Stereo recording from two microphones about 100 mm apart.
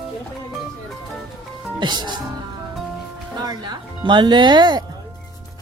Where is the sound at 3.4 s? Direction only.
45° right (ahead or behind).